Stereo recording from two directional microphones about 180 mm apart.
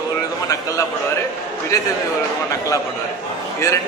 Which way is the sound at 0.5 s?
15° left (ahead or behind).